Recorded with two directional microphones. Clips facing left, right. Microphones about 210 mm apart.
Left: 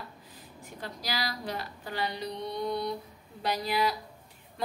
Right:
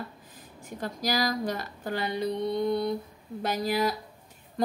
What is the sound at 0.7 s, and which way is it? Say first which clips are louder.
Speech: right 7 dB; 45° right (ahead or behind).